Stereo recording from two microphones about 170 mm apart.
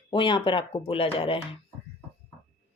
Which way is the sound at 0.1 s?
30° left (ahead or behind).